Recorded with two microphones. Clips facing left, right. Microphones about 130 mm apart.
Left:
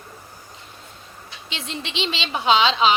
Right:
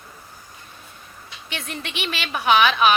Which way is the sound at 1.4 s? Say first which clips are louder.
Even; 20° left (ahead or behind).